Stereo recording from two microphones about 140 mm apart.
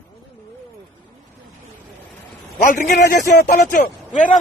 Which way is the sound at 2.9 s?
70° left (ahead or behind).